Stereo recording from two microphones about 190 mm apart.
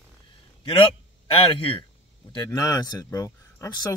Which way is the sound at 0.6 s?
25° left (ahead or behind).